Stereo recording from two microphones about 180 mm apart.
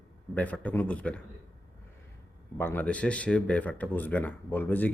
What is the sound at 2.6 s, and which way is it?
Speech, 10° left (ahead or behind).